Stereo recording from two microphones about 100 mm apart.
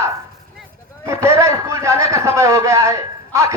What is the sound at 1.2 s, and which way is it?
A man's voice, 30° right (ahead or behind).